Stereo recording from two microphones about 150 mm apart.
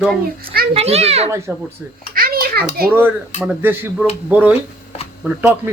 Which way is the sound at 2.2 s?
75° right (ahead or behind).